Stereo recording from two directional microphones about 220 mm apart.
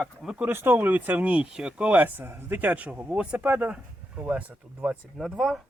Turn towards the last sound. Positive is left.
turn(degrees=0)  # may be behind; listen again after turning